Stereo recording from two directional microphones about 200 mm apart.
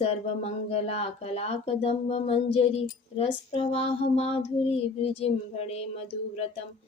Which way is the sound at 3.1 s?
30° left (ahead or behind).